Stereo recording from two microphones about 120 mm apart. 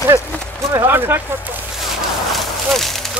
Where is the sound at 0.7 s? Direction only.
20° right (ahead or behind).